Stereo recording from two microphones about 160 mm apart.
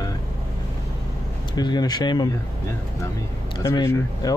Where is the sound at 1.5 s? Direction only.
25° left (ahead or behind).